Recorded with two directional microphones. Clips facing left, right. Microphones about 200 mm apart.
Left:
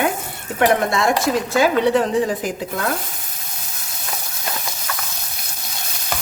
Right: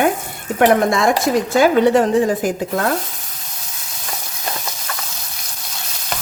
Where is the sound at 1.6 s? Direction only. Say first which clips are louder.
Right 4 dB; 50° right (ahead or behind).